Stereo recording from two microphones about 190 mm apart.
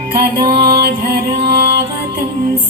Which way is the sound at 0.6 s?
55° right (ahead or behind).